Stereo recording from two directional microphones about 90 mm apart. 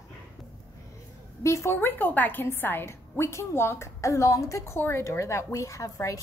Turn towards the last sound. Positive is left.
turn(degrees=35)  # may be behind; listen again after turning